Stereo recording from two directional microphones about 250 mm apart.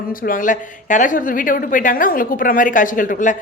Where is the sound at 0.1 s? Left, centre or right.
Left.